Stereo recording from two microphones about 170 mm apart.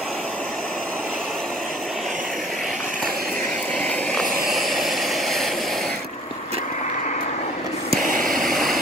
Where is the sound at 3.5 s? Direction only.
5° left (ahead or behind).